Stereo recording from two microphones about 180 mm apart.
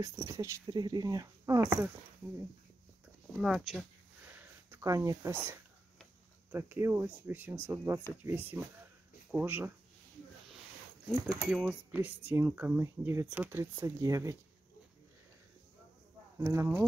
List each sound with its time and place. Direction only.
0.0 s speech: 15° right (ahead or behind)
3.3 s speech: centre (ahead or behind)
4.4 s speech: 10° right (ahead or behind)
11.4 s speech: 5° right (ahead or behind)
16.3 s speech: 15° right (ahead or behind)